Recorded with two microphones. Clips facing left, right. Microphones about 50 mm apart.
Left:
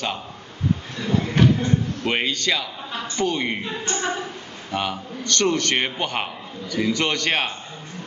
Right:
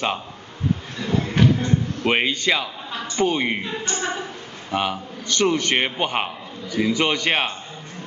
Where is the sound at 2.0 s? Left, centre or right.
Centre.